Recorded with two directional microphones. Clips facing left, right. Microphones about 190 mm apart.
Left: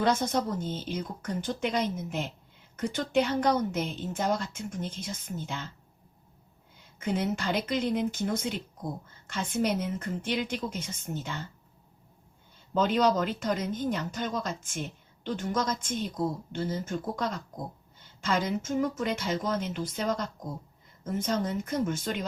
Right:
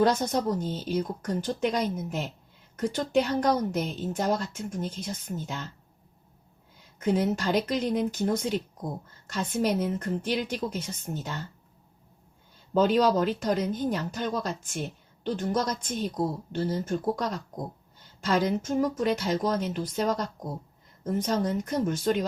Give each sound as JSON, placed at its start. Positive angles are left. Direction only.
{"t": 0.0, "sound": "speech", "side_deg": -40}
{"t": 7.0, "sound": "speech", "side_deg": -40}
{"t": 12.7, "sound": "speech", "side_deg": -40}
{"t": 18.3, "sound": "speech", "side_deg": -40}